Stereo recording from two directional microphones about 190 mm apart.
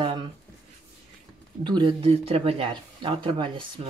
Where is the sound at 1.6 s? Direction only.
25° right (ahead or behind).